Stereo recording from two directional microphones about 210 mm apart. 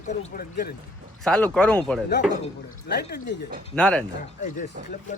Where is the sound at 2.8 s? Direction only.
50° left (ahead or behind).